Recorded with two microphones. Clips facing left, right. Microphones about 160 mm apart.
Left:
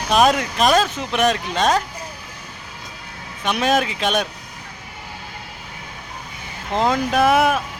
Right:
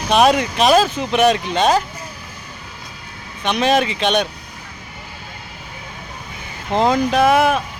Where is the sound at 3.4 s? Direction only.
5° left (ahead or behind).